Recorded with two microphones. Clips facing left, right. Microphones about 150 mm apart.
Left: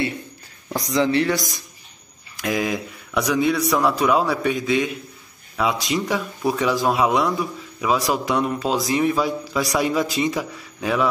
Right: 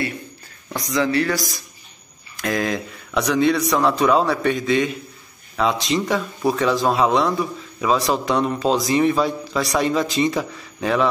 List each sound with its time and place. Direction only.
0.9 s speech: 25° left (ahead or behind)
2.3 s a man's voice: 10° left (ahead or behind)